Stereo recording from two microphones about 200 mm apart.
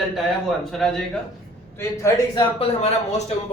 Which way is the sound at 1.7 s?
15° left (ahead or behind).